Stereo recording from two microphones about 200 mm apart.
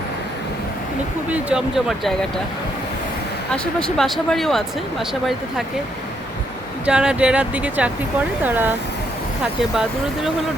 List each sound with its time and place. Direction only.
1.3 s speech: 5° right (ahead or behind)
3.5 s speech: 5° left (ahead or behind)
6.8 s speech: 5° right (ahead or behind)